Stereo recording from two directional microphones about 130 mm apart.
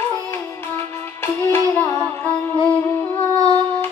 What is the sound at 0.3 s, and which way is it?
Music, 20° left (ahead or behind).